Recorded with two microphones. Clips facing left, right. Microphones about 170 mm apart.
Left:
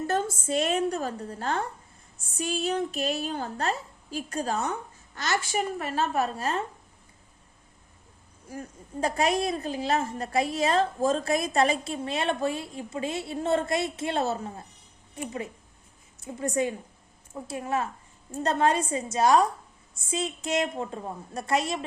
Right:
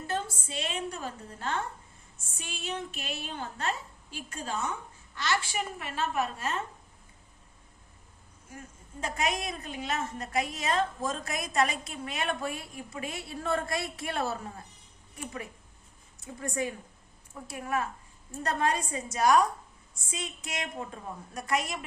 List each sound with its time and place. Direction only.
0.1 s a woman's voice: 45° left (ahead or behind)
8.4 s a woman's voice: 35° left (ahead or behind)